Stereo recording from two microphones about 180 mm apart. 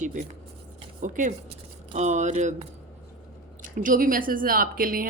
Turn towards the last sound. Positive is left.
turn(degrees=-50)  # may be behind; listen again after turning